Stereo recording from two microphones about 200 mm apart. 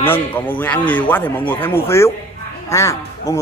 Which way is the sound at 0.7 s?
10° left (ahead or behind).